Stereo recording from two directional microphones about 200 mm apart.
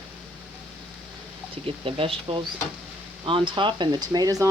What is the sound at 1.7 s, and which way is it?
Speech, 25° right (ahead or behind).